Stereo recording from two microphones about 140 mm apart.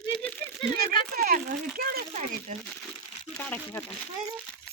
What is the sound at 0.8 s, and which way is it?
Speech, 90° right.